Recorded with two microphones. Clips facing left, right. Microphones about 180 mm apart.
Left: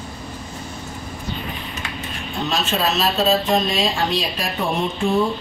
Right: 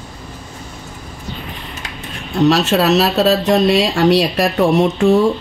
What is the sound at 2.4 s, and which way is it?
Speech, 70° right (ahead or behind).